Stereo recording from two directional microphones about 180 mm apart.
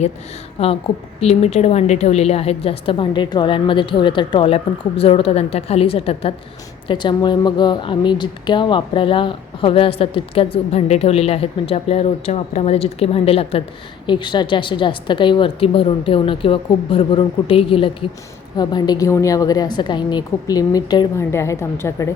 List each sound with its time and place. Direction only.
0.6 s a woman's voice: 35° left (ahead or behind); by 22.1 s 15° left (ahead or behind)